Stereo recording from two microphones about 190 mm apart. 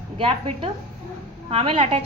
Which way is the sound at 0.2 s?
30° right (ahead or behind).